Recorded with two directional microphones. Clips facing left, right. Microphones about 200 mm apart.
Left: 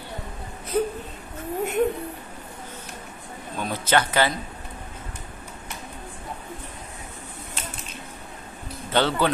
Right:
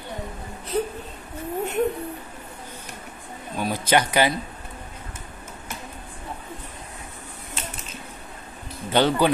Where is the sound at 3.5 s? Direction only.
10° right (ahead or behind).